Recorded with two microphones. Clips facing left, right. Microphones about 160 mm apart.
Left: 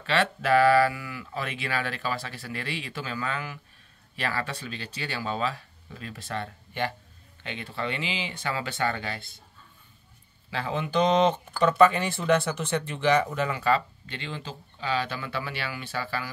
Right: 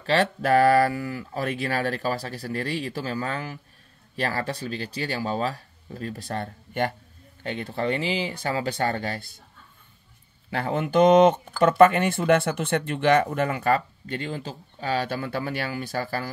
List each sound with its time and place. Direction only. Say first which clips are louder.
0.0 s speech: right 3 dB; 40° right (ahead or behind)
10.5 s speech: right 4 dB; 50° right (ahead or behind)